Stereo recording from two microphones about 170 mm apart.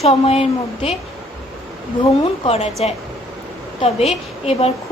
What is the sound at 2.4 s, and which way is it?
A woman's voice, 35° left (ahead or behind).